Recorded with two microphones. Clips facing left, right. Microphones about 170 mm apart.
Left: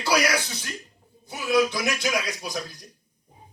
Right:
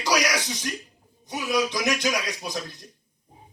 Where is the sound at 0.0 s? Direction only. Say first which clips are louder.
Left 1 dB; 15° right (ahead or behind).